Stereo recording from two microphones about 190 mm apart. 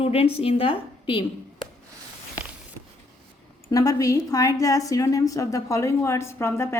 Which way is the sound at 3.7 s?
20° left (ahead or behind).